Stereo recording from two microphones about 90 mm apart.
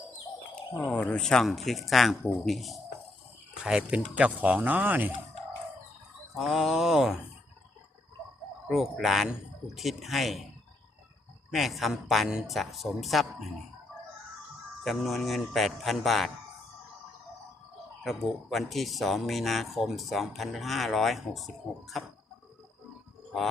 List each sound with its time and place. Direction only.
0.9 s speech: 10° left (ahead or behind); by 5.1 s 20° right (ahead or behind)
6.3 s speech: centre (ahead or behind)
8.6 s speech: 5° right (ahead or behind)
11.5 s speech: centre (ahead or behind)
14.8 s speech: centre (ahead or behind)
18.0 s speech: centre (ahead or behind)